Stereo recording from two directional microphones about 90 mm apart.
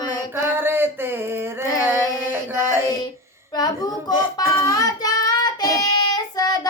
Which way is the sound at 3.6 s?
50° left (ahead or behind).